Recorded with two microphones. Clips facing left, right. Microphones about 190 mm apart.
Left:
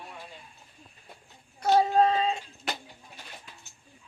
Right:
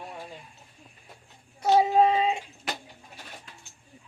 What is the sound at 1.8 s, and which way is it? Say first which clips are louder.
Child singing: right 2 dB; 10° right (ahead or behind).